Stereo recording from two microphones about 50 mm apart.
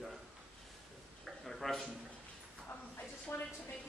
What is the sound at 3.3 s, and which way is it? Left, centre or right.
Speech, left.